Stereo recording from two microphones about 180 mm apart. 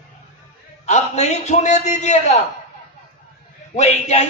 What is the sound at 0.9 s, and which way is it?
A man's voice, 40° left (ahead or behind).